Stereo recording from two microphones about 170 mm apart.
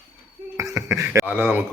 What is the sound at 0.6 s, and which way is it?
Speech, 15° right (ahead or behind).